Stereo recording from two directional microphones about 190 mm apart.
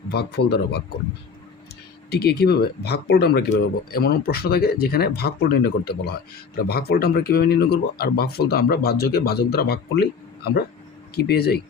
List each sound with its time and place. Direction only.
0.1 s speech: 60° left (ahead or behind)
2.0 s speech: 55° left (ahead or behind)
11.3 s speech: 55° left (ahead or behind)